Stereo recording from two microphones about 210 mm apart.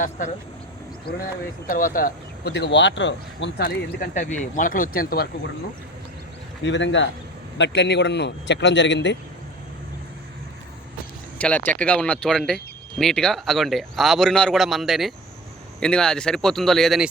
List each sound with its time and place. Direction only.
1.6 s speech: 40° left (ahead or behind)
6.7 s a man's voice: 60° left (ahead or behind)
11.3 s speech: 5° left (ahead or behind)